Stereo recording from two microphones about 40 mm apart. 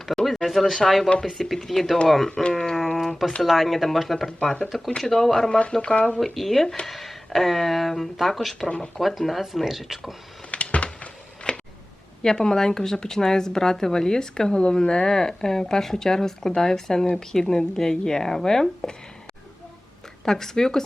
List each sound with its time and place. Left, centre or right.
0.1 s a sound: centre
0.4 s speech: centre
2.5 s a sound: centre
3.4 s speech: centre
5.8 s speech: left
6.1 s speech: centre
8.6 s speech: left
9.0 s speech: centre
10.5 s a sound: left
11.5 s a sound: centre
12.2 s speech: centre
20.2 s speech: centre